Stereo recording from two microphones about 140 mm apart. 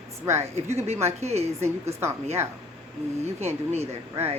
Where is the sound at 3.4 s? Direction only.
50° right (ahead or behind).